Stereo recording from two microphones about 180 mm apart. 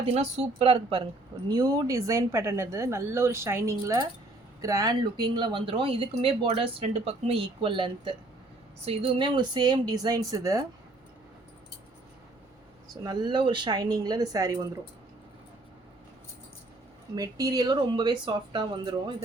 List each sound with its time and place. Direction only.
0.0 s a woman's voice: 35° right (ahead or behind)
1.5 s speech: 20° right (ahead or behind)
13.1 s speech: 25° right (ahead or behind)
17.2 s speech: 20° right (ahead or behind)